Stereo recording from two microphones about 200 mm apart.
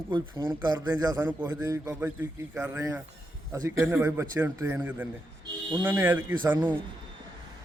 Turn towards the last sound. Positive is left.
turn(degrees=-20)  # may be behind; listen again after turning